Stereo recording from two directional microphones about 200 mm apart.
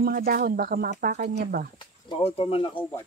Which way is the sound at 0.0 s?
45° right (ahead or behind).